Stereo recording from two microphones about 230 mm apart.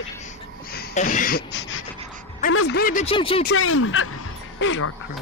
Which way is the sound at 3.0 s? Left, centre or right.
Left.